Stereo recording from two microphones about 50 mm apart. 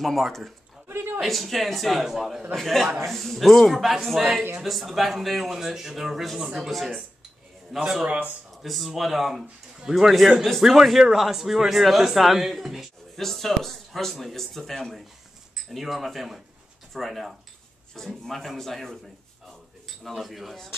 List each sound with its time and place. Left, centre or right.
0.0 s a man's voice: centre
0.8 s a sound: right
1.2 s a man's voice: centre
8.1 s speech: right
8.6 s a man's voice: centre
20.0 s a man's voice: centre